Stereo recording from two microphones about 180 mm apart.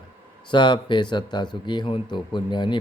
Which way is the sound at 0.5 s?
25° left (ahead or behind).